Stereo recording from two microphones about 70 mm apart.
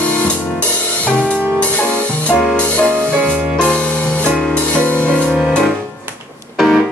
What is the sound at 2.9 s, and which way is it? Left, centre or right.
Music, right.